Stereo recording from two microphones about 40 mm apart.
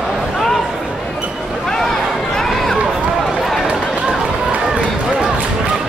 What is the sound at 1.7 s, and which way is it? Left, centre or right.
Run, centre.